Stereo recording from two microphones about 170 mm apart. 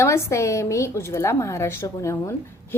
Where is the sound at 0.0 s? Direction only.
15° left (ahead or behind).